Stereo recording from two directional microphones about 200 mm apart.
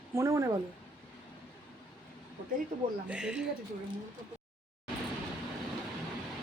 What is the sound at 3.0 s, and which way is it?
Speech, 5° right (ahead or behind).